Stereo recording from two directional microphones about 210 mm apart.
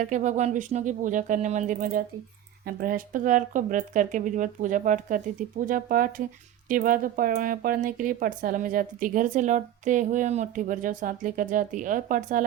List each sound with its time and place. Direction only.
0.0 s speech: 35° right (ahead or behind)